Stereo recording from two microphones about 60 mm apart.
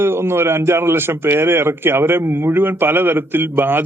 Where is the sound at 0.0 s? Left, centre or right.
Right.